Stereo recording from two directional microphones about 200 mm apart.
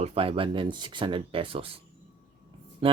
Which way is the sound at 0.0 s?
30° right (ahead or behind).